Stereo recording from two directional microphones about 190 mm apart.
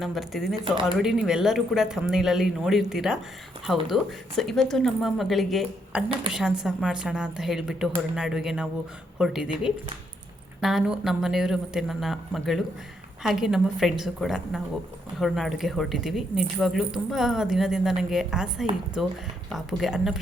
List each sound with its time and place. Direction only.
0.0 s speech: centre (ahead or behind)
0.5 s speech: 25° right (ahead or behind)
0.9 s speech: 5° right (ahead or behind)